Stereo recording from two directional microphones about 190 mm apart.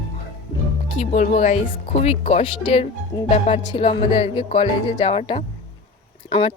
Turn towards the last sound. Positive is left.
turn(degrees=30)  # may be behind; listen again after turning